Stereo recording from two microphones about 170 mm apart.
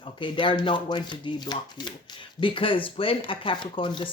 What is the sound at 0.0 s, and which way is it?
Speech, 30° left (ahead or behind).